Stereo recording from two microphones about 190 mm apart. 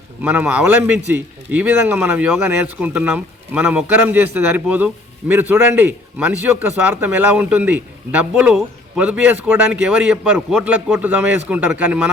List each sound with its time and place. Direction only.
0.2 s a man's voice: 10° right (ahead or behind)